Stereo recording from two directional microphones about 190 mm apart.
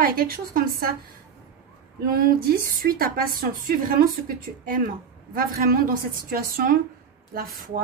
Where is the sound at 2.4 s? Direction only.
55° right (ahead or behind).